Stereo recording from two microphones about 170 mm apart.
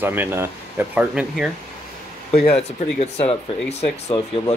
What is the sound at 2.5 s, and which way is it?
Speech, 40° left (ahead or behind).